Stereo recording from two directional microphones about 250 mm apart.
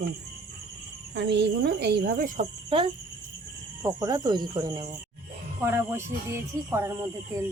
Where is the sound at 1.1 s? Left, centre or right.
Right.